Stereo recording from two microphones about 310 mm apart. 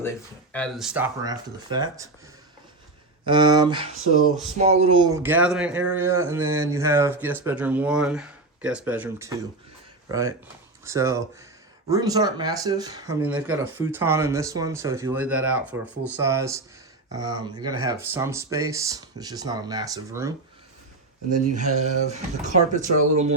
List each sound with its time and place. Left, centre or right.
0.0 s speech: centre
3.2 s speech: centre
21.2 s speech: right